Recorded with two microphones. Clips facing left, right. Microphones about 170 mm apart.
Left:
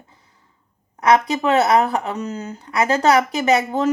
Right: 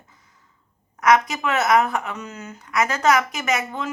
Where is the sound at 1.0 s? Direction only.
30° left (ahead or behind).